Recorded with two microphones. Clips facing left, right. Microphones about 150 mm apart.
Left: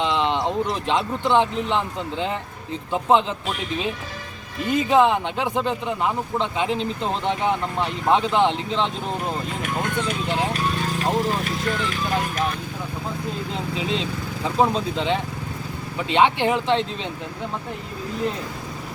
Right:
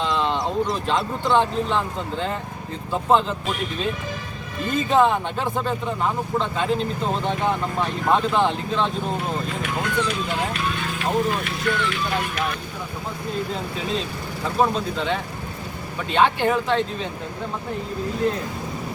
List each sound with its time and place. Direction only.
0.0 s a sound: 20° left (ahead or behind)
1.3 s speech: 15° left (ahead or behind)
4.8 s speech: 15° left (ahead or behind)
9.6 s speech: 45° left (ahead or behind)
10.2 s speech: 35° left (ahead or behind)
14.6 s speech: 25° left (ahead or behind)